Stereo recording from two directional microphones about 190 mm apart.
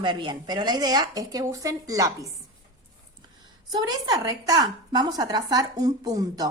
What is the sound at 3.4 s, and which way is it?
Speech, 20° right (ahead or behind).